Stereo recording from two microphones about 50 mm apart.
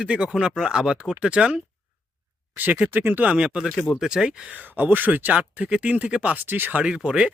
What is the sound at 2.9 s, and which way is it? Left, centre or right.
Speech, right.